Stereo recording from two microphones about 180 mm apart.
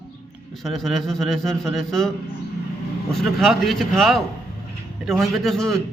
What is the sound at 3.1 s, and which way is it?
A man's voice, centre (ahead or behind).